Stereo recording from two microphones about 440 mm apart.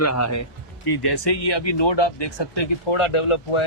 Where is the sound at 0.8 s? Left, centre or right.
Left.